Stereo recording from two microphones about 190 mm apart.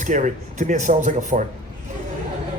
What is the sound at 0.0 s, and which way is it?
A man's voice, 40° right (ahead or behind).